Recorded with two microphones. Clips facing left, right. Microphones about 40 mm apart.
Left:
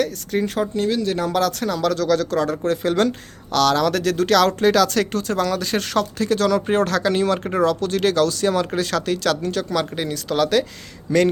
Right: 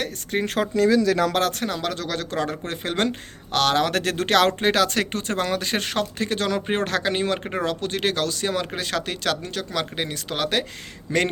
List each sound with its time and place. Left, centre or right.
0.0 s speech: right
0.4 s speech: right
1.4 s speech: right
11.1 s speech: right